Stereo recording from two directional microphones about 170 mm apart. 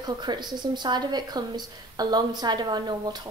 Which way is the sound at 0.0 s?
25° right (ahead or behind).